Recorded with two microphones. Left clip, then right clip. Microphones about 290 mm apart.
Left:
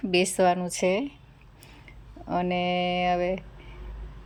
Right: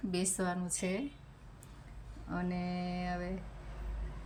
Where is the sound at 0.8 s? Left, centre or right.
Left.